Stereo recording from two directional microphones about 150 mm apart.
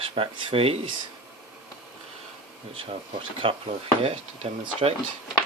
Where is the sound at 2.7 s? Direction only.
40° right (ahead or behind).